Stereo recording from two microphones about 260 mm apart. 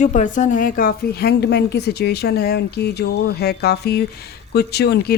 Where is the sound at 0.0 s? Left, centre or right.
Left.